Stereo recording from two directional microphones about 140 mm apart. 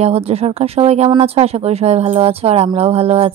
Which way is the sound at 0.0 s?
45° right (ahead or behind).